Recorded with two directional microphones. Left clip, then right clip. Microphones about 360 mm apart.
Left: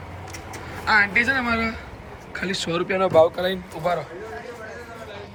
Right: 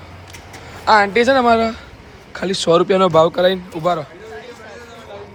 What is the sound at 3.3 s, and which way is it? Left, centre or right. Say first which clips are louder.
Speech: right 10 dB; right.